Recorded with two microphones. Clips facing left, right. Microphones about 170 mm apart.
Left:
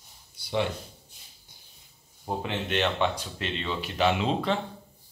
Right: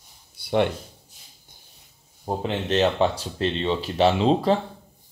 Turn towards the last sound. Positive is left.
turn(degrees=-35)  # may be behind; listen again after turning